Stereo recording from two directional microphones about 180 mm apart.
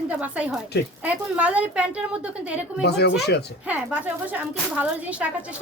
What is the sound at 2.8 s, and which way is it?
Speech, 65° left (ahead or behind).